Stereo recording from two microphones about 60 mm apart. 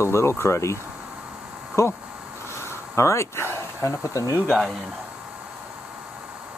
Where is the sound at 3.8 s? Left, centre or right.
Left.